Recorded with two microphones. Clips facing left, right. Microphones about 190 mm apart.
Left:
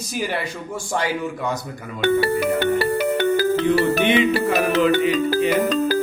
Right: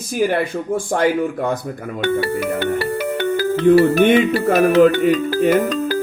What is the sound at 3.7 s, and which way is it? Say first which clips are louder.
A man's voice: right 10 dB; 50° right (ahead or behind).